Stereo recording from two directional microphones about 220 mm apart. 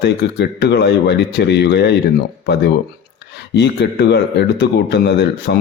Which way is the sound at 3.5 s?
50° left (ahead or behind).